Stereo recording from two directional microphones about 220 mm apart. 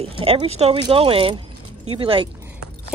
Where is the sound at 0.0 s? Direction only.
25° right (ahead or behind).